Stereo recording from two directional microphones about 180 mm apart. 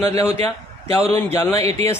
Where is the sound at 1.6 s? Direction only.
35° right (ahead or behind).